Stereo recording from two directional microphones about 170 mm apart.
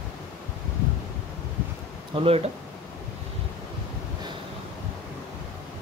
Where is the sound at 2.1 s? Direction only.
35° right (ahead or behind).